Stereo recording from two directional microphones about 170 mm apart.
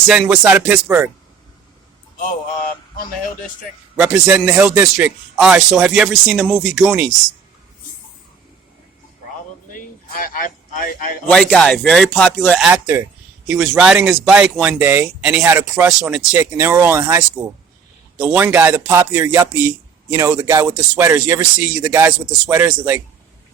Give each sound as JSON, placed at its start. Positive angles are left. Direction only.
{"t": 0.1, "sound": "speech", "side_deg": -5}
{"t": 3.9, "sound": "a man's voice", "side_deg": -10}
{"t": 9.7, "sound": "a sound", "side_deg": 55}
{"t": 11.3, "sound": "a man's voice", "side_deg": 5}
{"t": 12.5, "sound": "a man's voice", "side_deg": -5}